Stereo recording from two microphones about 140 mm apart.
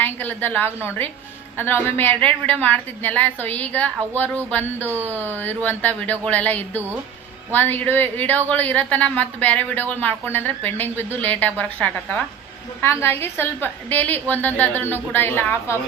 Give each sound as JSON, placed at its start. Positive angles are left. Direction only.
{"t": 0.0, "sound": "speech", "side_deg": 10}
{"t": 4.9, "sound": "speech", "side_deg": -15}
{"t": 5.6, "sound": "speech", "side_deg": 10}